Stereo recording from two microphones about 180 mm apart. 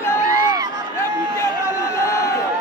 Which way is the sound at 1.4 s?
15° left (ahead or behind).